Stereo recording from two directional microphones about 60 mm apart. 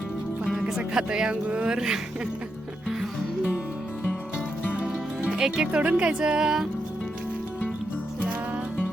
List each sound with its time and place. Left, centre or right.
0.8 s speech: centre
4.8 s speech: centre